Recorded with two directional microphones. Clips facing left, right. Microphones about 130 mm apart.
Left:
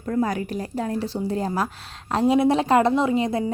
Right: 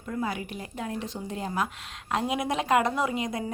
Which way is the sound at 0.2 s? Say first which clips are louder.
Left 8 dB; 40° left (ahead or behind).